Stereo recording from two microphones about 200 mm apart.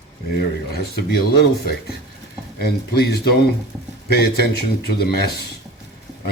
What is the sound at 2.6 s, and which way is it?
A man's voice, 50° left (ahead or behind).